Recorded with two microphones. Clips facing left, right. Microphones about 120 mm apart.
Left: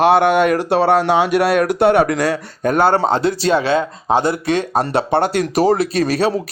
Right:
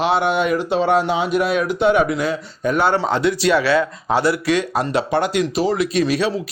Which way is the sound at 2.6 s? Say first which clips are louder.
Left 3 dB; 45° left (ahead or behind).